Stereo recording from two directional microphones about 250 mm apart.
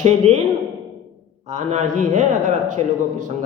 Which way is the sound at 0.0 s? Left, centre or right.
Right.